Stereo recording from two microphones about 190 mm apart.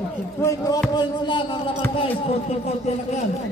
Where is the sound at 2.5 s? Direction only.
35° left (ahead or behind).